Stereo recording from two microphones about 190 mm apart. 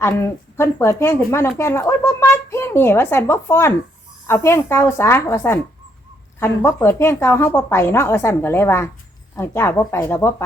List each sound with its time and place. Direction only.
0.0 s speech: 15° left (ahead or behind)